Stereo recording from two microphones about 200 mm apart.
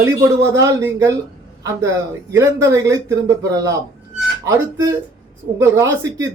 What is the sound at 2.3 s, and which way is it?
A man's voice, 15° right (ahead or behind).